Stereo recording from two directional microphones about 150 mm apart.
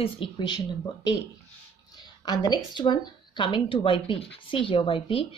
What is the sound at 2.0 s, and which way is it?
Speech, 25° left (ahead or behind).